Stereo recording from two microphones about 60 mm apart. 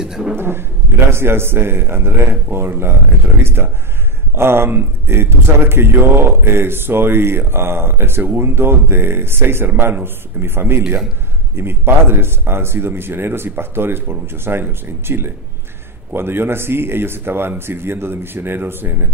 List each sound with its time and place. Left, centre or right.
0.0 s speech: centre
0.3 s speech: right